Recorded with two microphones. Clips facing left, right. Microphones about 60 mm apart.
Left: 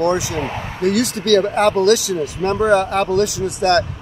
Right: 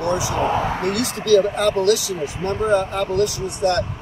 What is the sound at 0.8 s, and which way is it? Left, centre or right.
Speech, left.